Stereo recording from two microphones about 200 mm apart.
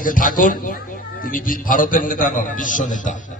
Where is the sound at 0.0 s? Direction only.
45° left (ahead or behind).